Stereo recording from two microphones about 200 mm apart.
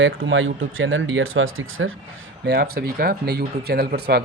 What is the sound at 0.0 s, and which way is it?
Speech, 70° right (ahead or behind).